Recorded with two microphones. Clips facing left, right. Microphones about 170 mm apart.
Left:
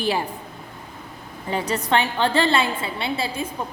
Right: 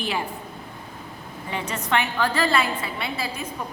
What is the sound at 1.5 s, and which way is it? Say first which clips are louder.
A woman's voice: left 4 dB; 35° left (ahead or behind).